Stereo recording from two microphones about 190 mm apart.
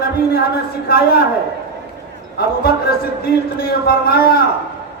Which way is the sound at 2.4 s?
55° left (ahead or behind).